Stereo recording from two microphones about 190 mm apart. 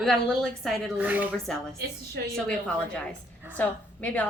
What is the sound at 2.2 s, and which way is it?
Speech, 65° right (ahead or behind).